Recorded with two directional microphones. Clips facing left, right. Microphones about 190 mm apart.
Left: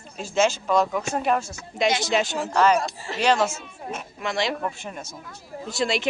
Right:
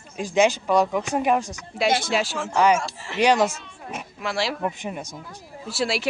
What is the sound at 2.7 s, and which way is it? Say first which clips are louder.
Speech: left 2 dB; 35° left (ahead or behind).